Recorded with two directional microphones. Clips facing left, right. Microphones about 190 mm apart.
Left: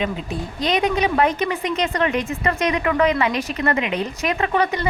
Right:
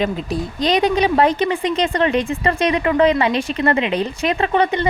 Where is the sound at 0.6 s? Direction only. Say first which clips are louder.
Right 3 dB; 35° right (ahead or behind).